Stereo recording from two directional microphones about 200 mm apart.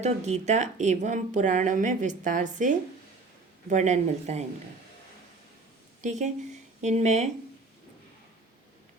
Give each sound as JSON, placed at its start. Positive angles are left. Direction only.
{"t": 0.0, "sound": "speech", "side_deg": -35}
{"t": 6.0, "sound": "a woman's voice", "side_deg": -35}